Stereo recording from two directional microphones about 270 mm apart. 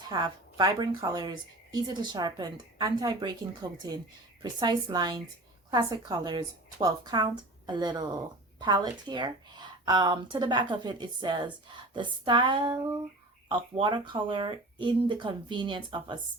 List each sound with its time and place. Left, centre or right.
0.1 s a woman's voice: centre